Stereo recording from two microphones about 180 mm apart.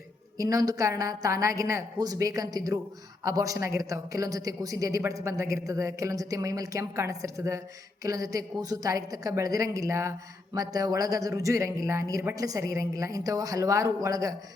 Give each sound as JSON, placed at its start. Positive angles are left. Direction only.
{"t": 0.3, "sound": "a woman's voice", "side_deg": -20}